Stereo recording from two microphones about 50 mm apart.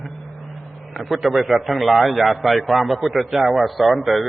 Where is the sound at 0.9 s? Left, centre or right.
Centre.